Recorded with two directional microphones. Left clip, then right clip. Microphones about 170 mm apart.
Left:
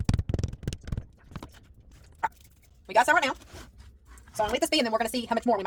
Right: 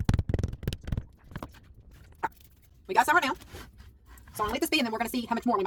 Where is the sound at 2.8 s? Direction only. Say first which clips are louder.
Left 1 dB; 30° left (ahead or behind).